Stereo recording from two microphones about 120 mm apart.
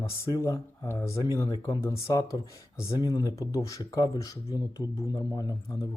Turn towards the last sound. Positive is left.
turn(degrees=30)  # may be behind; listen again after turning